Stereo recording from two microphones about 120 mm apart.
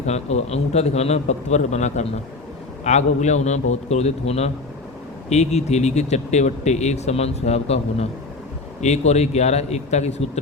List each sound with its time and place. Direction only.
0.0 s a man's voice: 65° left (ahead or behind)